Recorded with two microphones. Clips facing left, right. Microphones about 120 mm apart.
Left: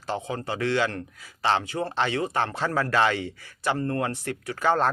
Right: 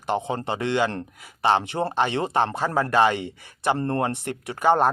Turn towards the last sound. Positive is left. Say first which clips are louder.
# right 4 dB
turn(degrees=-15)  # may be behind; listen again after turning